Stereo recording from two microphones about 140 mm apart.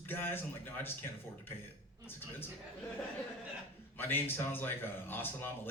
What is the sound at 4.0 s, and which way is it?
A man's voice, 15° left (ahead or behind).